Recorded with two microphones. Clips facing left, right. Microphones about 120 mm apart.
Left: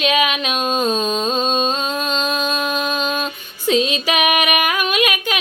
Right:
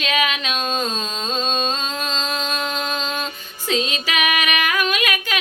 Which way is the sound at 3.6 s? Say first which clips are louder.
Left 6 dB; 20° left (ahead or behind).